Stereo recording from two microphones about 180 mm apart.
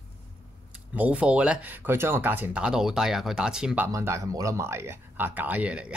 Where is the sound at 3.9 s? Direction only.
15° right (ahead or behind).